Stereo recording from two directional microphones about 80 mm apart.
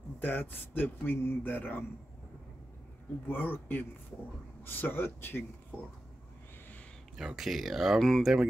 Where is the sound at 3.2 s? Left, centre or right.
Left.